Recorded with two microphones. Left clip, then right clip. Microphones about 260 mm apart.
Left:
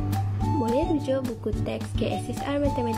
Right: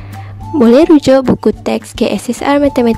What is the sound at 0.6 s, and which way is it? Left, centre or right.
Speech, right.